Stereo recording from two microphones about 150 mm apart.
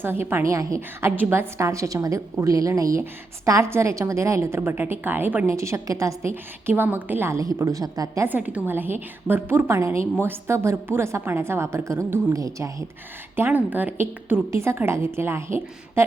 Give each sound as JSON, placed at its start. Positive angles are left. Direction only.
{"t": 0.0, "sound": "a woman's voice", "side_deg": -15}